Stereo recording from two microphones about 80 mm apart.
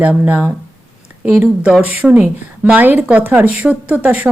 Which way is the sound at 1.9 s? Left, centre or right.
Right.